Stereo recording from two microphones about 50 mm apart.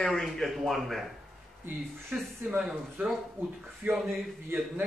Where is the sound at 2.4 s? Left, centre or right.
Right.